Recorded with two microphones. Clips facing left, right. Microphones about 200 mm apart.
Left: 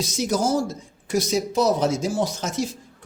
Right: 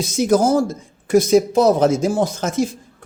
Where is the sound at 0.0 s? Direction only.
55° right (ahead or behind).